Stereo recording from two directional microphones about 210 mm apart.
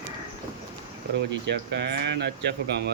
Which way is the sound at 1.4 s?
55° right (ahead or behind).